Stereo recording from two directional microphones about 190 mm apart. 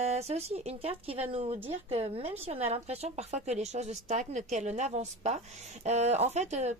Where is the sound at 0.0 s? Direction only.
35° right (ahead or behind).